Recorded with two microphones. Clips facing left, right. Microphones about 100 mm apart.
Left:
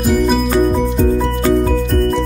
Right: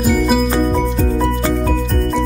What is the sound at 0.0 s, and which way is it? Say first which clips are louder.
Music: even; centre (ahead or behind).